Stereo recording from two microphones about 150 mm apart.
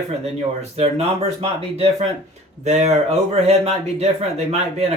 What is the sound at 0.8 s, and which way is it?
Speech, 40° right (ahead or behind).